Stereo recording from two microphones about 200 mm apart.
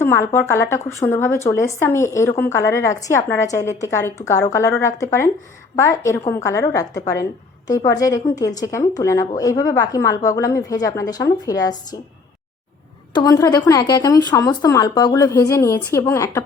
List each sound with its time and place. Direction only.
0.0 s a woman's voice: 15° left (ahead or behind)
13.1 s a woman's voice: 20° left (ahead or behind)